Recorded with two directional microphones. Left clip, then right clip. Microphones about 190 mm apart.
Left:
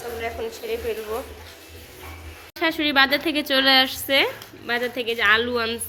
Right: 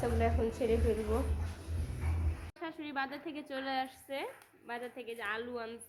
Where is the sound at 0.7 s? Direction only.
5° left (ahead or behind).